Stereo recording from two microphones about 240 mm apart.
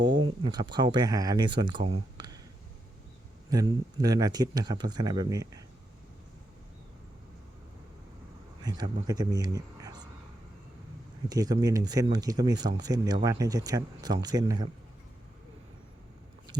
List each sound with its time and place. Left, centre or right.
0.0 s speech: centre
2.1 s a sound: centre
3.5 s speech: centre
8.6 s speech: centre
11.3 s speech: centre